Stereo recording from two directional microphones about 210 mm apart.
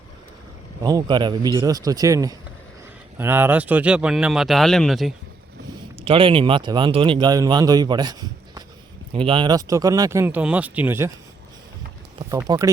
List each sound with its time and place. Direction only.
0.8 s speech: 15° right (ahead or behind); by 5.1 s centre (ahead or behind)
6.0 s speech: 25° right (ahead or behind)
9.1 s speech: 25° right (ahead or behind)
12.3 s speech: 15° right (ahead or behind)